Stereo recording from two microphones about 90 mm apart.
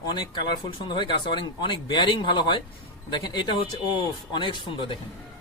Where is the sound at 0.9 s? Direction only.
60° left (ahead or behind).